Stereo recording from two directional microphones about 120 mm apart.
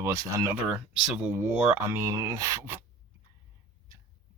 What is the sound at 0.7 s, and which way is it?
Speech, 10° right (ahead or behind).